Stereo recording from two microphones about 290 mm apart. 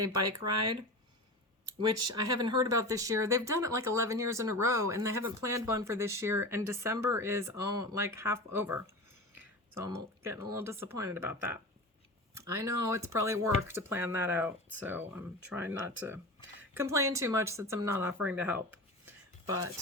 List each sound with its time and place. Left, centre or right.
0.2 s speech: right
2.2 s speech: centre